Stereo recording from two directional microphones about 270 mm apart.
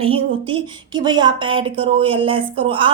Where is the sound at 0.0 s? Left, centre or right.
Centre.